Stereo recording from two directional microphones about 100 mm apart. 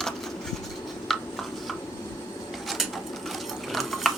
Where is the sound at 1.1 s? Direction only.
5° left (ahead or behind).